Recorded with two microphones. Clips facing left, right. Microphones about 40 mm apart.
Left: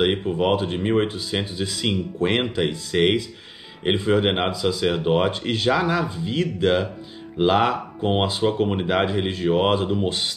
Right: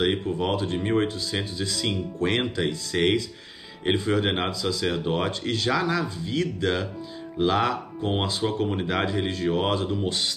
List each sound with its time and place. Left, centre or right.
0.0 s speech: left